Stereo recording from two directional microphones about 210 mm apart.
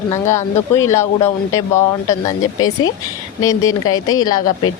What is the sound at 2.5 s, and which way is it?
Speech, 85° left.